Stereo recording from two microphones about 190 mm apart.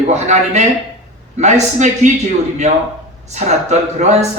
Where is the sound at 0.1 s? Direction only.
35° right (ahead or behind).